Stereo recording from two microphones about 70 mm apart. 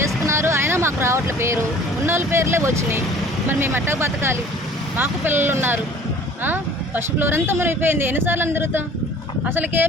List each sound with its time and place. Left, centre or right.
0.3 s boat: right
2.0 s speech: right